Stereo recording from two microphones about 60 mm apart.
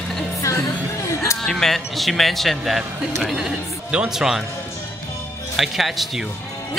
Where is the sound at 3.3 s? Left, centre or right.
Centre.